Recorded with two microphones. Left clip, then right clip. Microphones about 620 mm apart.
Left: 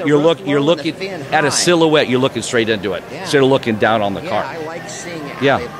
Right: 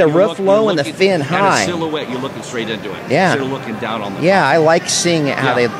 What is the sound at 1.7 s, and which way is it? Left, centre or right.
Speech, left.